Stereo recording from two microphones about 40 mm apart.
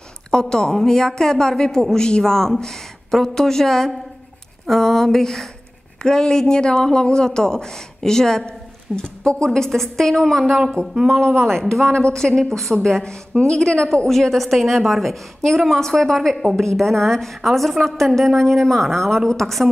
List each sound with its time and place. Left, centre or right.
0.3 s a woman's voice: centre
9.5 s a woman's voice: centre
11.8 s a woman's voice: left
12.1 s a woman's voice: centre